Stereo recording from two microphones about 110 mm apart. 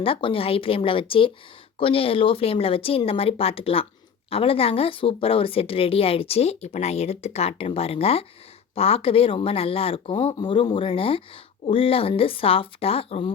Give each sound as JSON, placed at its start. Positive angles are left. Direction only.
{"t": 0.0, "sound": "speech", "side_deg": 55}